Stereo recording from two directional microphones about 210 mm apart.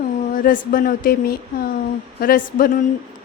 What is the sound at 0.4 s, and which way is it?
A woman's voice, 40° left (ahead or behind).